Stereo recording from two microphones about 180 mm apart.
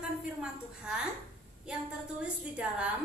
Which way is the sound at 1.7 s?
5° right (ahead or behind).